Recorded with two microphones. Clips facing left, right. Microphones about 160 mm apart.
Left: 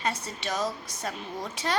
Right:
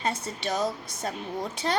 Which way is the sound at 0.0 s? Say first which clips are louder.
Right 2 dB; 30° right (ahead or behind).